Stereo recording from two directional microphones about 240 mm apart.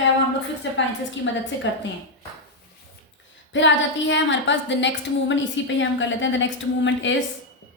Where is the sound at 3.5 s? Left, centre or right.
Left.